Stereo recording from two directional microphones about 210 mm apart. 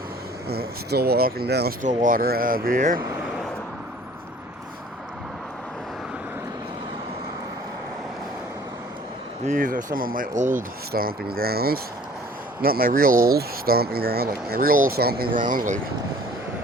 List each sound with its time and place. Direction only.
0.4 s speech: 50° right (ahead or behind)
1.8 s speech: 35° right (ahead or behind)
9.5 s speech: 40° right (ahead or behind)